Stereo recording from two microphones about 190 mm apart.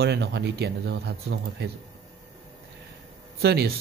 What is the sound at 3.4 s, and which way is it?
Speech, 55° right (ahead or behind).